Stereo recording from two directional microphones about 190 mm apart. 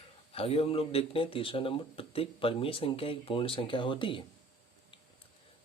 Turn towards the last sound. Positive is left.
turn(degrees=25)  # may be behind; listen again after turning